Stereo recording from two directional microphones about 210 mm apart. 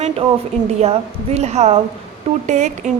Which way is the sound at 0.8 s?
30° right (ahead or behind).